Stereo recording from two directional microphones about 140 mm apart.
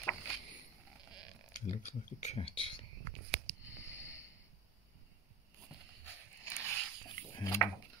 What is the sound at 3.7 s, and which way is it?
Snort, 20° left (ahead or behind).